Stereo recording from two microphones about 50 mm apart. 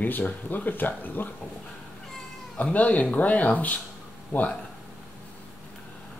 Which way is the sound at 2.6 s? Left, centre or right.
Left.